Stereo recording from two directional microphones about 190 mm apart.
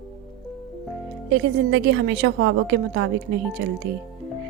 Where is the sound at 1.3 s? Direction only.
70° right (ahead or behind).